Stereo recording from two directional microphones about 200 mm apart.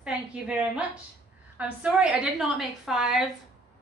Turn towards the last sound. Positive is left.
turn(degrees=0)  # may be behind; listen again after turning